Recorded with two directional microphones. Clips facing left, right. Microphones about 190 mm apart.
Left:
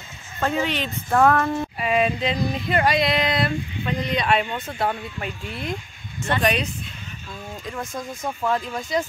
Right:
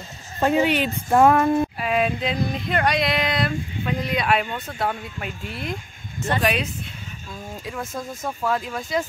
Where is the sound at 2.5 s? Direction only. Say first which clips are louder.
Left 1 dB; centre (ahead or behind).